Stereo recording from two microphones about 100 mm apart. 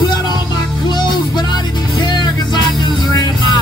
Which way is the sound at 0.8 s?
50° left (ahead or behind).